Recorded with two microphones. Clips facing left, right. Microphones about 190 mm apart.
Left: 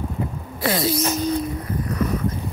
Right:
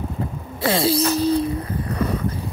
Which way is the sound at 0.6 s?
30° right (ahead or behind).